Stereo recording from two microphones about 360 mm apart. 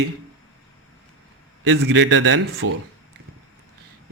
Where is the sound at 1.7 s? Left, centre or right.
Right.